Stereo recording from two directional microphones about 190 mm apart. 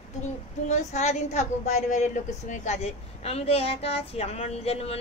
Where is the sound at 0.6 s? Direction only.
35° left (ahead or behind).